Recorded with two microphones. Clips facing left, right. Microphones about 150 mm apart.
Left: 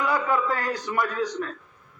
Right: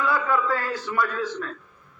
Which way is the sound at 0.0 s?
20° left (ahead or behind).